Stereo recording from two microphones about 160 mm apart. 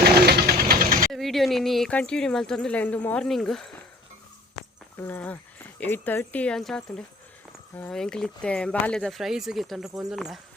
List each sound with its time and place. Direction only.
0.0 s sewing machine: 85° right; by 1.1 s 60° right (ahead or behind)
1.1 s speech: centre (ahead or behind)
4.9 s speech: 10° left (ahead or behind)